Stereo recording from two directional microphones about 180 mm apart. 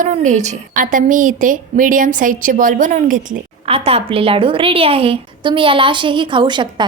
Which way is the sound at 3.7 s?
35° right (ahead or behind).